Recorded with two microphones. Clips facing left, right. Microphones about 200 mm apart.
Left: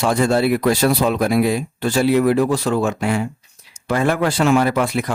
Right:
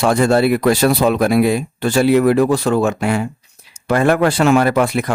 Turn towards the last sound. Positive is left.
turn(degrees=-60)  # may be behind; listen again after turning